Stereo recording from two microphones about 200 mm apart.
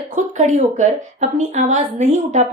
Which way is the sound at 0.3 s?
35° right (ahead or behind).